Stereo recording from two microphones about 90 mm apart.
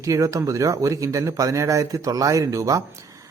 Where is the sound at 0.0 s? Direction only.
35° right (ahead or behind).